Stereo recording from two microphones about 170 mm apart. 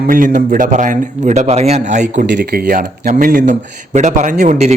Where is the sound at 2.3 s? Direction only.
70° right (ahead or behind).